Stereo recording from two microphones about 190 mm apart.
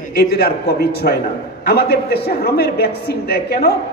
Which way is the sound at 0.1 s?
55° left (ahead or behind).